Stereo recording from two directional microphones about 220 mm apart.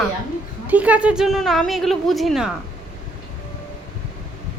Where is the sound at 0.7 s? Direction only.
5° right (ahead or behind).